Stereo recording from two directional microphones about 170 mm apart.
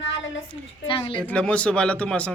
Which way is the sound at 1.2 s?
5° left (ahead or behind).